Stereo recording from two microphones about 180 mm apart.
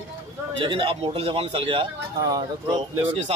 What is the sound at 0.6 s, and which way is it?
A man's voice, 25° right (ahead or behind).